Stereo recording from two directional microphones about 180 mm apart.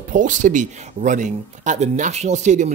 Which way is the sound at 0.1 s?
45° right (ahead or behind).